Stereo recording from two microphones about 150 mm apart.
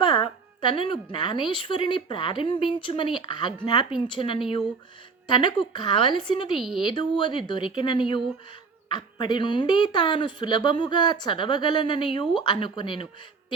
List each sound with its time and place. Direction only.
0.0 s a sound: 30° left (ahead or behind)
1.1 s speech: 30° left (ahead or behind)
6.6 s speech: centre (ahead or behind)
6.8 s speech: 30° left (ahead or behind)